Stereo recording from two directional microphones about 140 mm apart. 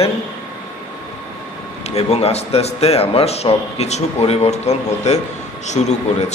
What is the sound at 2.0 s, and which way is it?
A man's voice, 45° left (ahead or behind).